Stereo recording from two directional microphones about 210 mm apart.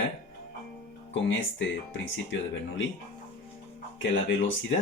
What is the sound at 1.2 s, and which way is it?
Speech, 60° left (ahead or behind).